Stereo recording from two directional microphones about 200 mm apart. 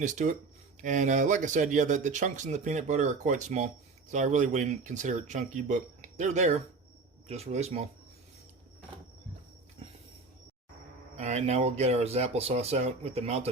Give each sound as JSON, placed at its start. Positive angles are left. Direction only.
{"t": 0.0, "sound": "speech", "side_deg": -40}
{"t": 11.2, "sound": "speech", "side_deg": -35}